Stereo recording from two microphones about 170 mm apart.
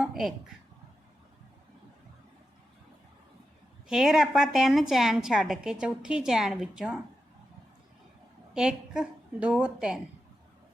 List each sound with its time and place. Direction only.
0.0 s a sound: centre (ahead or behind)
3.8 s a woman's voice: 5° right (ahead or behind)
8.5 s a woman's voice: 5° right (ahead or behind)